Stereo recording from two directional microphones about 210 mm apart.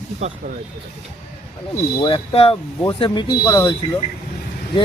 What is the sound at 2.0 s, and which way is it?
Speech, 25° left (ahead or behind).